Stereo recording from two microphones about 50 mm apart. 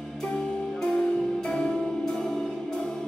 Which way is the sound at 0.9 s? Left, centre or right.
Left.